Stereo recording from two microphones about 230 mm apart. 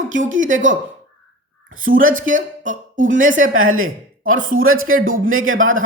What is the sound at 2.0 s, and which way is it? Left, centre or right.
Speech, right.